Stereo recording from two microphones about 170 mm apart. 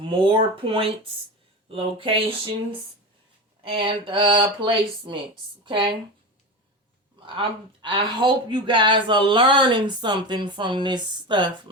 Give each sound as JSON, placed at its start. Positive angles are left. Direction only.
{"t": 0.0, "sound": "speech", "side_deg": -30}
{"t": 3.6, "sound": "speech", "side_deg": -30}
{"t": 7.3, "sound": "speech", "side_deg": -30}